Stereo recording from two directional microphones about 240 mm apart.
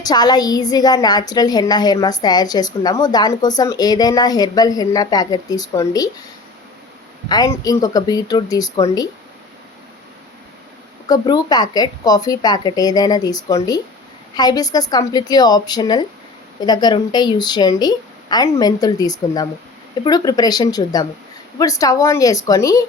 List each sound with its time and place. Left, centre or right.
0.0 s a woman's voice: centre
7.3 s a woman's voice: centre
11.1 s a woman's voice: centre